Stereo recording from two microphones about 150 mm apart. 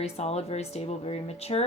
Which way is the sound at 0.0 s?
45° left (ahead or behind).